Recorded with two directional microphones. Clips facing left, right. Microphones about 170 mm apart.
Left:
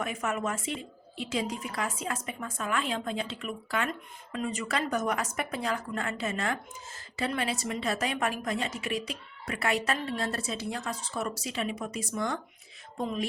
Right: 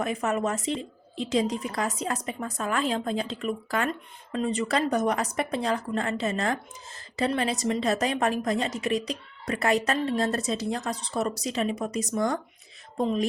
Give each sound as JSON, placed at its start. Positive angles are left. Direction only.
{"t": 0.0, "sound": "a woman's voice", "side_deg": -35}